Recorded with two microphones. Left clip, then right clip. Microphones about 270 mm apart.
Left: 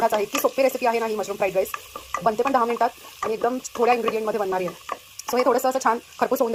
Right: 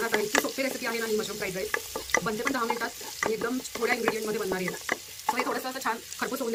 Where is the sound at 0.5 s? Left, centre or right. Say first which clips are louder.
Left 10 dB; left.